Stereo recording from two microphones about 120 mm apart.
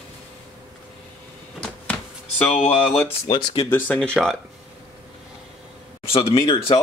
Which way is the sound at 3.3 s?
40° left (ahead or behind).